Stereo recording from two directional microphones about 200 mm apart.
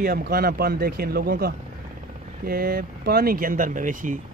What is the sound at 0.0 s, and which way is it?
Speech, 50° right (ahead or behind).